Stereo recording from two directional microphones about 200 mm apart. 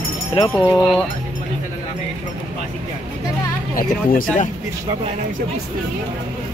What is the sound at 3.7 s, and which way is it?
Speech, 45° left (ahead or behind).